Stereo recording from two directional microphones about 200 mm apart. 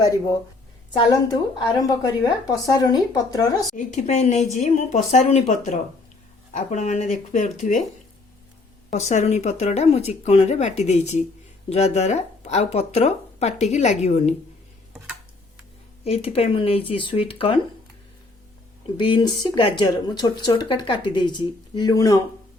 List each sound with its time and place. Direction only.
0.9 s speech: 20° left (ahead or behind)
3.8 s speech: 35° left (ahead or behind)
8.9 s speech: 35° left (ahead or behind)
16.0 s speech: 30° left (ahead or behind)
18.9 s speech: 25° left (ahead or behind)